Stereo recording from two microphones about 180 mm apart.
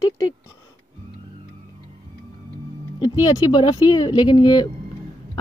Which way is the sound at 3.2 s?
25° left (ahead or behind).